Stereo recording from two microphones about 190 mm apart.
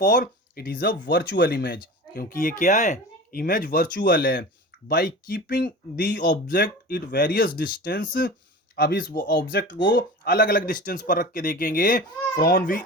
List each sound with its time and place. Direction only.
0.0 s speech: 50° left (ahead or behind)